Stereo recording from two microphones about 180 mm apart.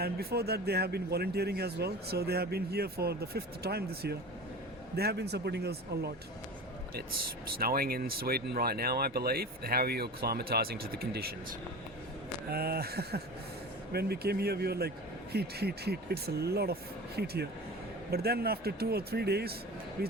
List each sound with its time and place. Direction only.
0.0 s speech: 60° right (ahead or behind)
7.6 s speech: 55° right (ahead or behind)
12.5 s speech: 60° right (ahead or behind)